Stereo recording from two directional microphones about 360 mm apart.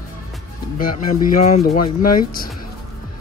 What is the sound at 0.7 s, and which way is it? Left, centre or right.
Speech, left.